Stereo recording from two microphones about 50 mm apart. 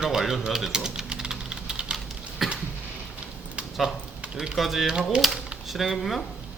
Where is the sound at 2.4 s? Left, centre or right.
Centre.